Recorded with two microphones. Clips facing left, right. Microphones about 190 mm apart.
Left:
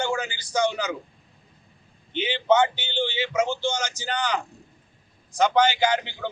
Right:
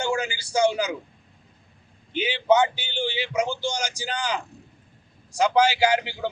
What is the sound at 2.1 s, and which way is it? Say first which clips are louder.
A man's voice: even; 10° right (ahead or behind).